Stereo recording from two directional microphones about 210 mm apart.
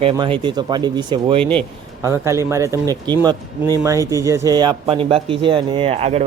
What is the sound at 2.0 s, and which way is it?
Speech, 15° right (ahead or behind).